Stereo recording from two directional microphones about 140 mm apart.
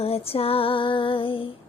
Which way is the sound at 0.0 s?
45° left (ahead or behind).